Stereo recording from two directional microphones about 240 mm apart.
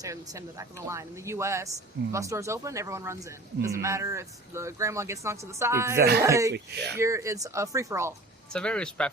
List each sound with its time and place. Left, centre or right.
0.0 s a man's voice: centre
6.0 s speech: right
6.2 s a man's voice: centre
6.5 s speech: right
7.0 s a man's voice: centre
8.5 s speech: centre